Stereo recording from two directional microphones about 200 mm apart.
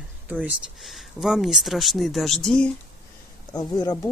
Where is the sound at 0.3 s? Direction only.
5° right (ahead or behind).